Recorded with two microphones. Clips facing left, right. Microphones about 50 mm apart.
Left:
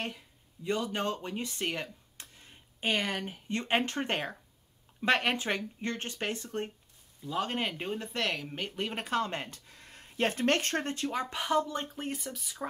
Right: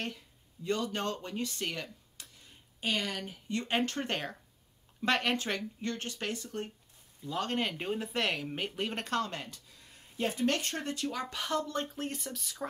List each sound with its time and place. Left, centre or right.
0.7 s speech: centre
5.8 s speech: left
7.2 s speech: centre
9.2 s speech: left; by 12.6 s centre